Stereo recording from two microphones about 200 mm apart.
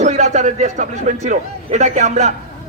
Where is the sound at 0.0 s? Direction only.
35° right (ahead or behind).